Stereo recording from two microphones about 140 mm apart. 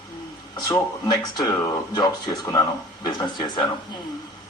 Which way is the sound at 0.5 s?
30° left (ahead or behind).